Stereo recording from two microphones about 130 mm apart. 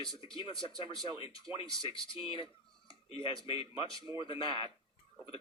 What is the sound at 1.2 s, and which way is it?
Speech, 45° left (ahead or behind).